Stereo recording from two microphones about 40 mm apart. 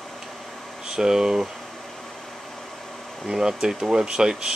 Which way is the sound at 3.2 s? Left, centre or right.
Centre.